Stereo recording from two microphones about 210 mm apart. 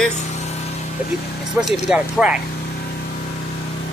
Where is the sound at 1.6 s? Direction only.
10° right (ahead or behind).